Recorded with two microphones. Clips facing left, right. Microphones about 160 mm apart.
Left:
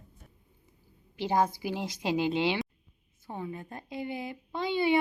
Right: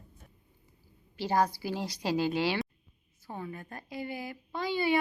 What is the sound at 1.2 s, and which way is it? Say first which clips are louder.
A woman's voice: left 1 dB; 20° left (ahead or behind).